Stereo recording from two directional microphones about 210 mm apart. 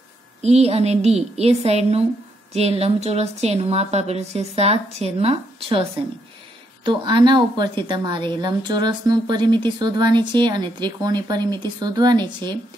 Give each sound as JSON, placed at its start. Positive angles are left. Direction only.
{"t": 0.4, "sound": "a woman's voice", "side_deg": -30}